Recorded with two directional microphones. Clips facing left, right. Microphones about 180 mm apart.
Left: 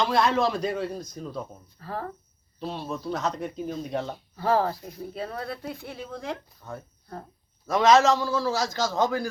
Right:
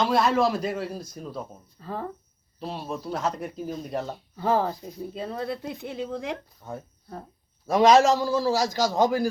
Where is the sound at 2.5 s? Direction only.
5° right (ahead or behind).